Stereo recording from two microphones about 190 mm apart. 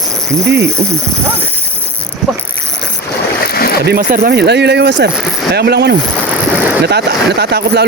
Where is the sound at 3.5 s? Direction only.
55° left (ahead or behind).